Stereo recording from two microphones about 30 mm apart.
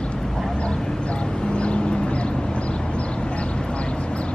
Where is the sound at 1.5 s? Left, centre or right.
Left.